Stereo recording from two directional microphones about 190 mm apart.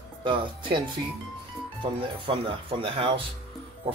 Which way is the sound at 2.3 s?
25° right (ahead or behind).